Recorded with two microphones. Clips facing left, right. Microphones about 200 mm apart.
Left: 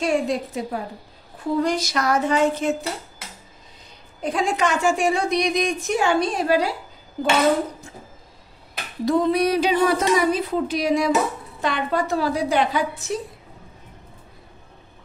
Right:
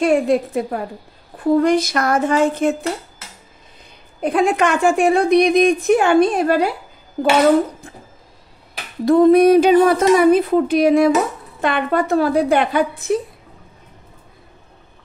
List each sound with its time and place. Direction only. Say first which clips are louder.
0.0 s a woman's voice: right 6 dB; 55° right (ahead or behind)
4.2 s a woman's voice: right 6 dB; 55° right (ahead or behind)
9.0 s a woman's voice: right 9 dB; 50° right (ahead or behind)